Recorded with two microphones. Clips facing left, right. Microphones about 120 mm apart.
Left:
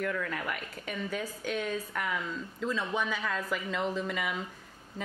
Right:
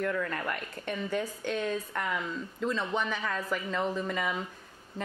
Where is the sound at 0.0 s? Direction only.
Centre (ahead or behind).